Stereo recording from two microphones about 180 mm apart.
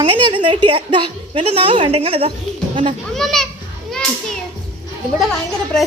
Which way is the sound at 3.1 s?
Centre (ahead or behind).